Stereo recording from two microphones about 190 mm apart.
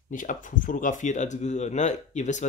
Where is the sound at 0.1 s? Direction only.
45° left (ahead or behind).